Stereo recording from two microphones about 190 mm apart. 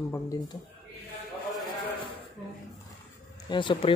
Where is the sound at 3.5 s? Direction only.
25° left (ahead or behind).